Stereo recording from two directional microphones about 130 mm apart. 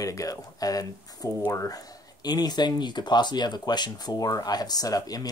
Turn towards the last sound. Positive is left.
turn(degrees=30)  # may be behind; listen again after turning